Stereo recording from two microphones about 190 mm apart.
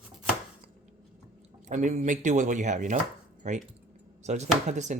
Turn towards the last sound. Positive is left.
turn(degrees=-40)  # may be behind; listen again after turning